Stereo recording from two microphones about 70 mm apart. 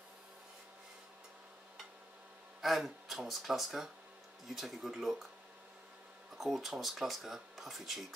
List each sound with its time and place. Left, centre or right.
2.6 s speech: centre
6.3 s speech: centre